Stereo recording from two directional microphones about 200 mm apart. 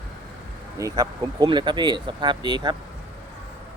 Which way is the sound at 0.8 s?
20° right (ahead or behind).